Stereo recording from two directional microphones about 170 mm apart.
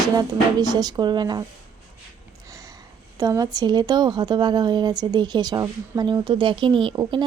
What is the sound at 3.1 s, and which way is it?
Speech, 20° right (ahead or behind).